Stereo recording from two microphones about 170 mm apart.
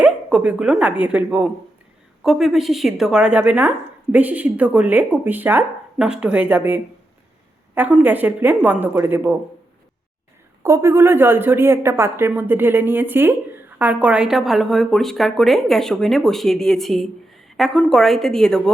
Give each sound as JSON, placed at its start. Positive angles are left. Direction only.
{"t": 0.0, "sound": "a woman's voice", "side_deg": -10}
{"t": 10.6, "sound": "a woman's voice", "side_deg": -15}